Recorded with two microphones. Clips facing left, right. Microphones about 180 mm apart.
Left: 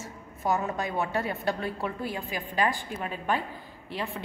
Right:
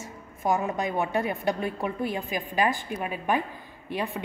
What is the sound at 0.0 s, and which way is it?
A woman's voice, 15° right (ahead or behind).